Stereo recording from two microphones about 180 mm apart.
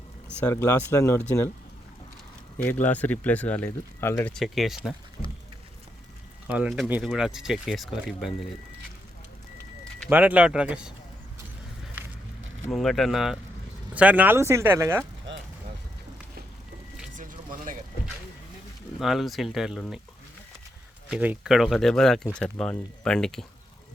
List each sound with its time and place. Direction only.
0.3 s speech: 10° left (ahead or behind)
2.6 s speech: 10° left (ahead or behind)
4.4 s speech: centre (ahead or behind)
5.2 s a sound: 15° left (ahead or behind)
6.5 s speech: 5° right (ahead or behind)
10.1 s speech: 10° right (ahead or behind)
12.7 s speech: centre (ahead or behind); by 15.0 s 15° right (ahead or behind)
17.2 s a sound: 50° right (ahead or behind)
18.9 s speech: centre (ahead or behind)
21.1 s speech: 5° right (ahead or behind)